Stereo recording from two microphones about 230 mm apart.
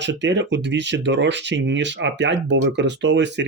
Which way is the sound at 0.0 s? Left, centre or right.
Right.